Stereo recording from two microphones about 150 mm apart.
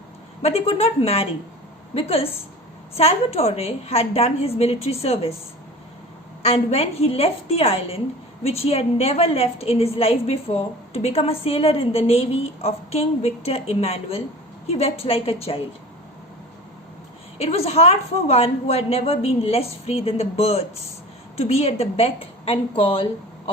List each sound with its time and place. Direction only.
0.4 s a woman's voice: 40° left (ahead or behind)
6.4 s a woman's voice: 40° left (ahead or behind)
17.3 s a woman's voice: 45° left (ahead or behind)